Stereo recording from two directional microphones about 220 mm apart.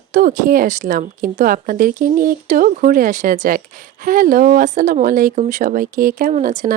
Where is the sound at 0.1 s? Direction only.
40° right (ahead or behind).